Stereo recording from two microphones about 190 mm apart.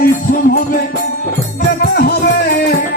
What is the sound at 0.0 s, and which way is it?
Music, 50° left (ahead or behind).